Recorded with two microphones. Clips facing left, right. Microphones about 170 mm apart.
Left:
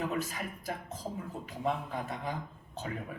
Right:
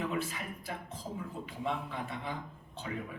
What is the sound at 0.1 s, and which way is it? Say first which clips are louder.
A woman's voice: left 1 dB; 40° left (ahead or behind).